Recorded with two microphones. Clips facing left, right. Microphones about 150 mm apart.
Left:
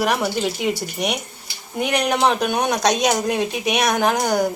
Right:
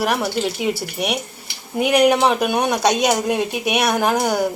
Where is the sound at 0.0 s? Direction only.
Centre (ahead or behind).